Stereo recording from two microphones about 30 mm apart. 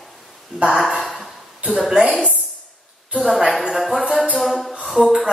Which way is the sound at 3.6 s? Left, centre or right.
Centre.